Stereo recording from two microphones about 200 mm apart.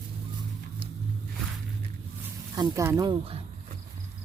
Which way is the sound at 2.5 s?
15° right (ahead or behind).